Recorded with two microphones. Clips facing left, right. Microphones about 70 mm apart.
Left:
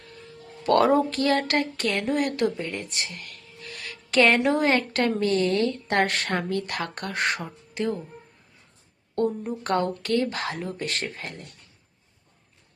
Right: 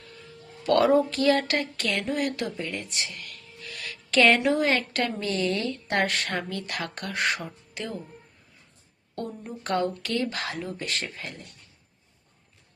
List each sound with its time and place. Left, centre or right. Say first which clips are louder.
0.6 s a woman's voice: left 1 dB; left
2.9 s music: left 1 dB; left
4.1 s a woman's voice: even; left
4.4 s a woman's voice: left 2 dB; left
9.6 s speech: left 2 dB; left